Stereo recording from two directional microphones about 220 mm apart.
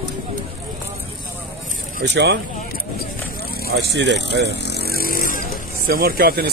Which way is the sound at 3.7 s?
50° right (ahead or behind).